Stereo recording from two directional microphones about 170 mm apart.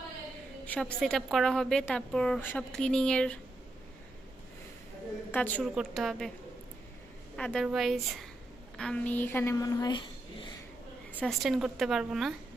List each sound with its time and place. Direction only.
0.6 s speech: 5° left (ahead or behind)
5.3 s a woman's voice: 10° left (ahead or behind)
5.7 s speech: centre (ahead or behind)
7.3 s a woman's voice: 5° left (ahead or behind); by 10.5 s 25° left (ahead or behind)
11.2 s speech: centre (ahead or behind)